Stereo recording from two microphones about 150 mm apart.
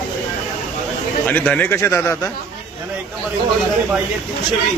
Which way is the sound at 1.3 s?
10° left (ahead or behind).